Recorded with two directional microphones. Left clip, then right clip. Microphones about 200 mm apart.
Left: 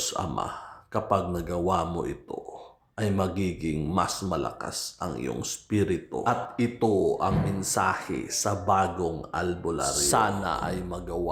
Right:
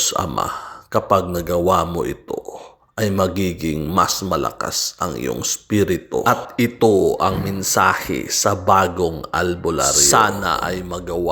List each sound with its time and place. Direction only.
0.0 s speech: 20° right (ahead or behind)